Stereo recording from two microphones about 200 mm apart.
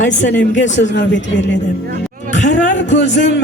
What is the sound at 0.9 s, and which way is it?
Speech, 65° left (ahead or behind).